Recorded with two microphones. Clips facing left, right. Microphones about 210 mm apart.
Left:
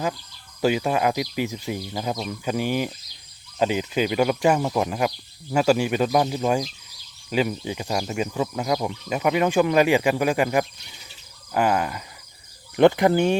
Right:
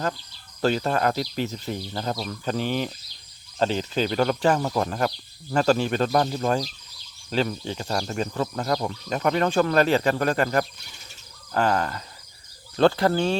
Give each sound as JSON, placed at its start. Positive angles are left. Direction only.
{"t": 0.6, "sound": "speech", "side_deg": 10}